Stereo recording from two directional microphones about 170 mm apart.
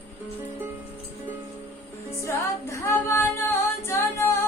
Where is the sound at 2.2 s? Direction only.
15° left (ahead or behind).